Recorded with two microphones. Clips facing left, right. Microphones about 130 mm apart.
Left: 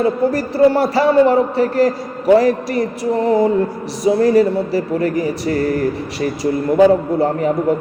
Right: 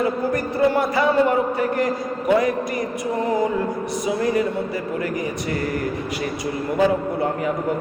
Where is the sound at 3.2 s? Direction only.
30° left (ahead or behind).